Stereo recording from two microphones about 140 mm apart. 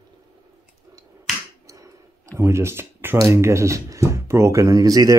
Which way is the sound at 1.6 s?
20° right (ahead or behind).